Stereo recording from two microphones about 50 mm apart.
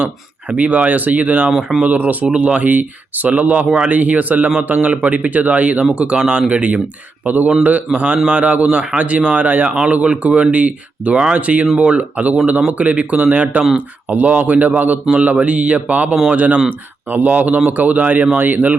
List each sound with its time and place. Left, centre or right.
0.5 s speech: right
1.5 s speech: centre
1.8 s speech: right